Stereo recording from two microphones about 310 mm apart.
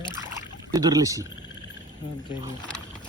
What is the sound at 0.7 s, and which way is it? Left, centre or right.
Speech, centre.